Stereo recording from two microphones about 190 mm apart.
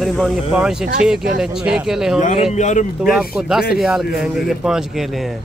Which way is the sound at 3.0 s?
Centre (ahead or behind).